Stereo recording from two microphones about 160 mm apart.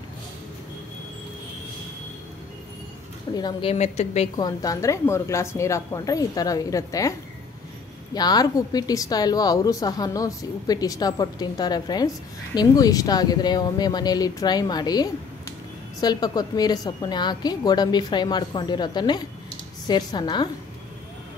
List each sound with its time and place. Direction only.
3.3 s speech: 25° left (ahead or behind)
3.7 s a woman's voice: 45° left (ahead or behind)
4.4 s speech: 25° left (ahead or behind)